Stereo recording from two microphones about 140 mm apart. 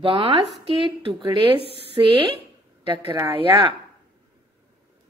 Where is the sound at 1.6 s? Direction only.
40° left (ahead or behind).